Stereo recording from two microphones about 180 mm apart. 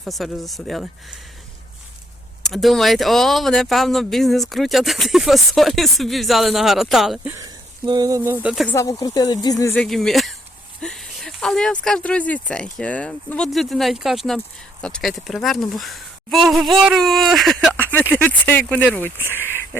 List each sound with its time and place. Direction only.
0.0 s speech: centre (ahead or behind)
2.5 s speech: centre (ahead or behind)
7.3 s speech: 20° right (ahead or behind); by 8.7 s 5° right (ahead or behind)
8.7 s speech: 20° left (ahead or behind)
9.7 s speech: 5° left (ahead or behind)